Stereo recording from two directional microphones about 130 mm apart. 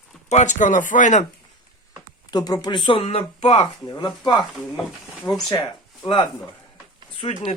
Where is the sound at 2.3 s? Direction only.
30° left (ahead or behind).